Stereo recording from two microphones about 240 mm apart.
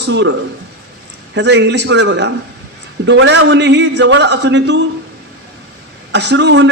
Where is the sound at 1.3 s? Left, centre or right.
Right.